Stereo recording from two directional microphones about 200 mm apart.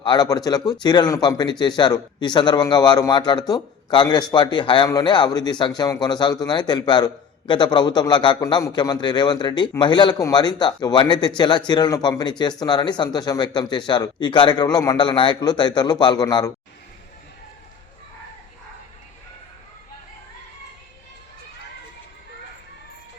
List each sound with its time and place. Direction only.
0.0 s speech: 20° left (ahead or behind)